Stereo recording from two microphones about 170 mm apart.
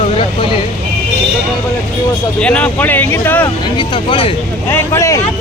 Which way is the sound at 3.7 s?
30° left (ahead or behind).